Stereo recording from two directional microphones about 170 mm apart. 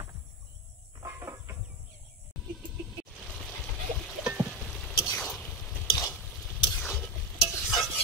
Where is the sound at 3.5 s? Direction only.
Centre (ahead or behind).